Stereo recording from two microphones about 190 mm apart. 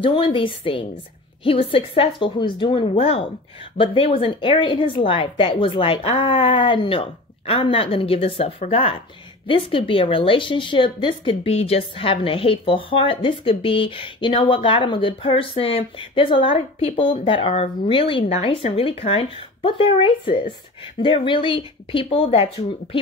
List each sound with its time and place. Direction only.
0.0 s speech: 25° left (ahead or behind)